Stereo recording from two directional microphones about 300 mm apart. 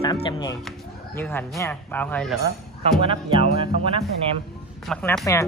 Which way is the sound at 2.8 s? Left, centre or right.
Centre.